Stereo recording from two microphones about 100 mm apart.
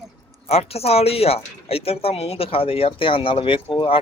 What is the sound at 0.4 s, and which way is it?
A woman's voice, 90° left.